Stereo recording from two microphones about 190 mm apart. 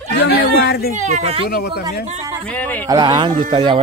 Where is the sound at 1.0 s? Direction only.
35° right (ahead or behind).